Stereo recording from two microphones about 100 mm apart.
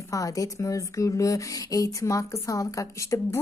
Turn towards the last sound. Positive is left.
turn(degrees=30)  # may be behind; listen again after turning